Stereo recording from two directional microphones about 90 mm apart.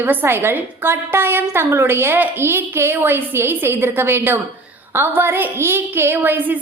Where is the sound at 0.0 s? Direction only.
20° right (ahead or behind).